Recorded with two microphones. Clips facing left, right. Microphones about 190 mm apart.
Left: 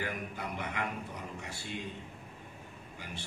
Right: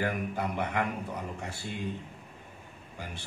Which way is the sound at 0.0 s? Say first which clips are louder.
Right 7 dB; 55° right (ahead or behind).